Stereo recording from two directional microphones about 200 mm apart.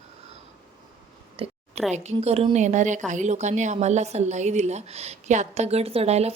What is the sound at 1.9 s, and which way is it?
Speech, 35° right (ahead or behind).